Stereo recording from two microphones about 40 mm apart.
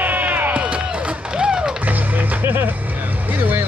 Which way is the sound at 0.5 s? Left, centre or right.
Right.